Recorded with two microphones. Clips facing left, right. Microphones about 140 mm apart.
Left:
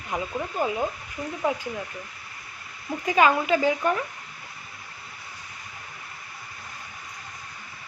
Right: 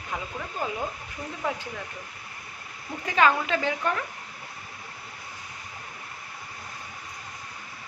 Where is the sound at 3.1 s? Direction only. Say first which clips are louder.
Left 2 dB; 10° left (ahead or behind).